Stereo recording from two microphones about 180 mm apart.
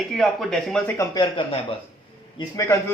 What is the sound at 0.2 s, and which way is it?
Speech, 5° left (ahead or behind).